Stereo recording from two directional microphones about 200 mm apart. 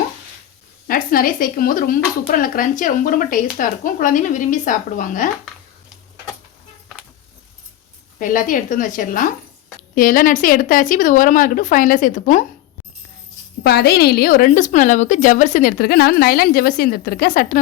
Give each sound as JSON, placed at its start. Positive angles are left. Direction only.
{"t": 0.9, "sound": "a woman's voice", "side_deg": 45}
{"t": 8.2, "sound": "speech", "side_deg": 40}
{"t": 13.7, "sound": "a woman's voice", "side_deg": 50}